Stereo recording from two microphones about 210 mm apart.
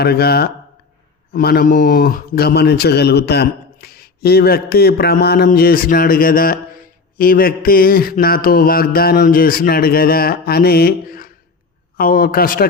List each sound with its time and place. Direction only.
0.0 s a man's voice: 50° left (ahead or behind)